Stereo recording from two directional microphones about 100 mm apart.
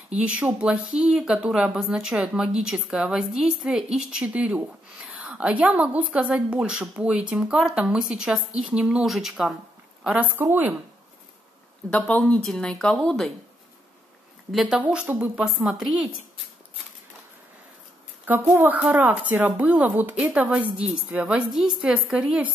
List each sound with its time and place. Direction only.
0.1 s speech: 10° right (ahead or behind)
10.0 s speech: 15° right (ahead or behind)
11.9 s speech: 15° left (ahead or behind)
14.5 s speech: 5° right (ahead or behind)
18.4 s speech: 20° right (ahead or behind)